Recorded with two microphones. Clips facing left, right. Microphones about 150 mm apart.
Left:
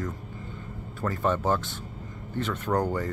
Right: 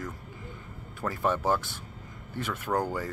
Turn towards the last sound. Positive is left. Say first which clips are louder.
# left 3 dB
turn(degrees=-10)  # may be behind; listen again after turning